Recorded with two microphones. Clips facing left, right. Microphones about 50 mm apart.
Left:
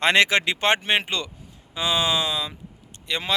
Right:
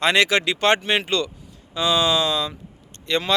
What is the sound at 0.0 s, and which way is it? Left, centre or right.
Speech, left.